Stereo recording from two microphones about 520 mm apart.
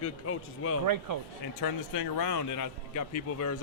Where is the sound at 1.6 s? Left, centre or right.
Left.